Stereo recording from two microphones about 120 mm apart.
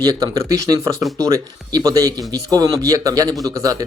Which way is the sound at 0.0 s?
35° right (ahead or behind).